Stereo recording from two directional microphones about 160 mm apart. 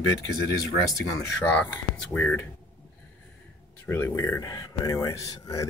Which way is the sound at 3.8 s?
15° left (ahead or behind).